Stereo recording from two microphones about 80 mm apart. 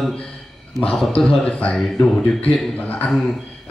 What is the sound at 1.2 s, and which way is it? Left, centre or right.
Speech, centre.